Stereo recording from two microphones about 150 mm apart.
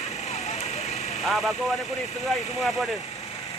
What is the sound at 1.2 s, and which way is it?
Speech, centre (ahead or behind).